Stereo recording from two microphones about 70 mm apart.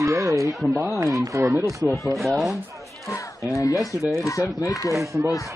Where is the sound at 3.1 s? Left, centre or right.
Left.